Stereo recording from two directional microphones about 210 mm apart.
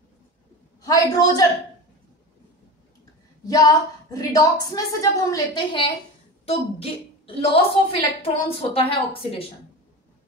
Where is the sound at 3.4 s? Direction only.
15° left (ahead or behind).